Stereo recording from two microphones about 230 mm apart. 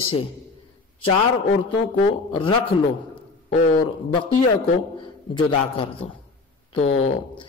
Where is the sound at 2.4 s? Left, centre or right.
Left.